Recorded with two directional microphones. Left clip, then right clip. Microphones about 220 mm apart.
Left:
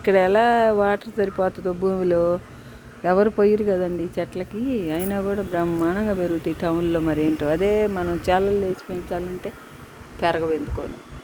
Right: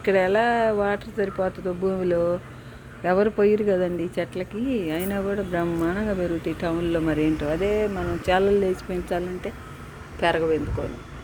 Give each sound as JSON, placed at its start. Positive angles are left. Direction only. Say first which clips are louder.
{"t": 0.0, "sound": "speech", "louder": "left 3 dB", "side_deg": 15}
{"t": 7.3, "sound": "speech", "louder": "left 4 dB", "side_deg": 20}
{"t": 8.3, "sound": "speech", "louder": "even", "side_deg": 5}